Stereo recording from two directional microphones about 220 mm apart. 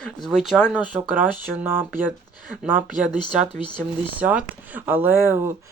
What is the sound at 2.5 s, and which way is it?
Speech, 5° right (ahead or behind).